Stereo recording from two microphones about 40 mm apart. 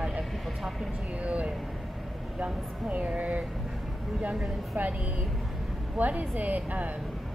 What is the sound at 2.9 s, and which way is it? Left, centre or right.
Speech, right.